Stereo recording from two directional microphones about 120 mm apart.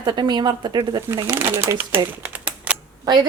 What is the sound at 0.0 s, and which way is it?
A woman's voice, 35° right (ahead or behind).